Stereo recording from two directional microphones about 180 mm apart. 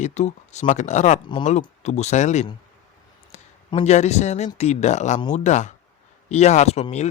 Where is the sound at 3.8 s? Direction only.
40° left (ahead or behind).